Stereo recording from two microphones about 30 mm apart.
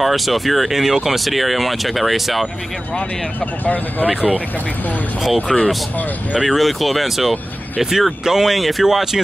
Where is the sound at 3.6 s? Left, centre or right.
Left.